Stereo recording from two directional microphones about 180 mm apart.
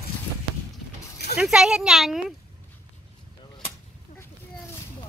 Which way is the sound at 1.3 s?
5° right (ahead or behind).